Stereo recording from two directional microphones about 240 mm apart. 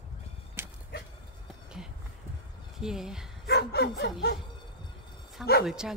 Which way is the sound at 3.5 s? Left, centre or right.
Left.